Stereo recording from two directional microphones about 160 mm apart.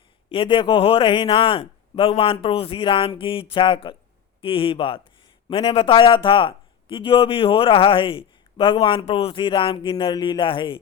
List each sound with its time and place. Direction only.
0.3 s speech: 30° left (ahead or behind)